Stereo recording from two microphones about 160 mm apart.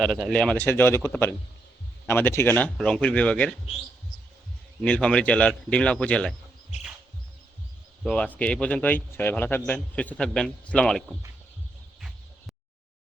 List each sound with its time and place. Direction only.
0.0 s speech: centre (ahead or behind)
4.8 s speech: 5° left (ahead or behind)
8.0 s speech: 5° left (ahead or behind)
11.9 s a sound: centre (ahead or behind)